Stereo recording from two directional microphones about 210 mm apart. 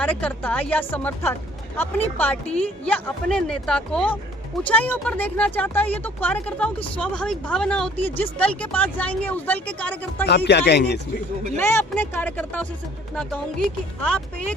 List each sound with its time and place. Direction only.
0.0 s speech: 5° left (ahead or behind)
10.2 s speech: 50° left (ahead or behind)
11.5 s speech: 10° left (ahead or behind)
14.0 s speech: 5° left (ahead or behind)